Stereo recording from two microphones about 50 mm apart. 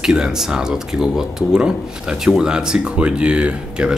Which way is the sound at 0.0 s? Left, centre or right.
Centre.